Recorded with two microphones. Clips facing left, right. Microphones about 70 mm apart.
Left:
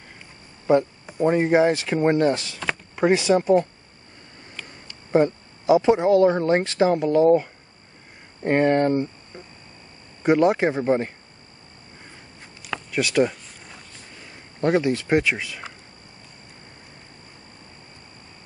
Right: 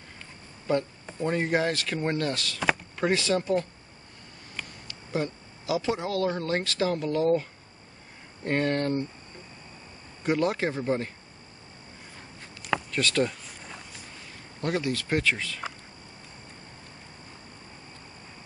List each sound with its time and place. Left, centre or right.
0.7 s speech: centre
4.6 s speech: left
10.2 s speech: left
12.9 s speech: centre
13.3 s a sound: centre
14.6 s speech: left